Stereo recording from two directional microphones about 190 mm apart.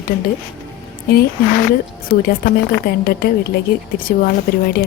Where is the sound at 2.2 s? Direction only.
55° left (ahead or behind).